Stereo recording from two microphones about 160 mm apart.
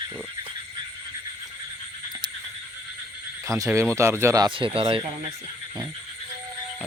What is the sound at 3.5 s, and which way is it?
Speech, 20° right (ahead or behind).